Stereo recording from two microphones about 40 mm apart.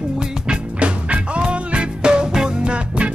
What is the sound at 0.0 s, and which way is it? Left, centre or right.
Music, centre.